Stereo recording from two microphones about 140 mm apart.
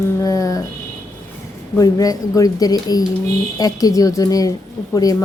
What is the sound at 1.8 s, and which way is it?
A woman's voice, 25° left (ahead or behind).